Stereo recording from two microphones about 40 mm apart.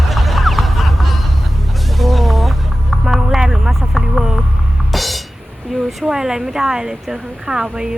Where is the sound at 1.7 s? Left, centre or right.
Centre.